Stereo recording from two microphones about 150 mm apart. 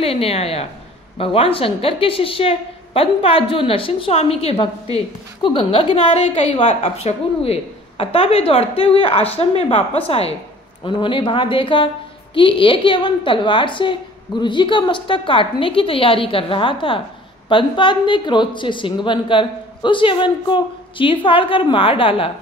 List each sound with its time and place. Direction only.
0.0 s a woman's voice: 40° left (ahead or behind)